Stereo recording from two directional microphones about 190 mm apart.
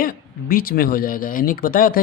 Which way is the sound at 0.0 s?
50° left (ahead or behind).